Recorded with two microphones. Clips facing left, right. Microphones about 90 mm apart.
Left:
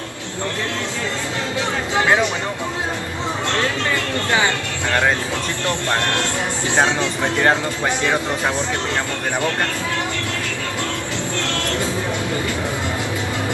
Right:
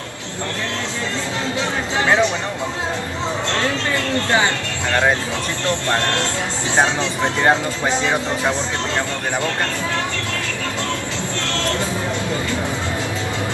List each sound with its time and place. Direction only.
5.9 s speech: 20° left (ahead or behind)
6.8 s speech: 15° right (ahead or behind)